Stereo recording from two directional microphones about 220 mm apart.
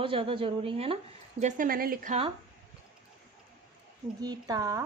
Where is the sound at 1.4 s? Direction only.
35° right (ahead or behind).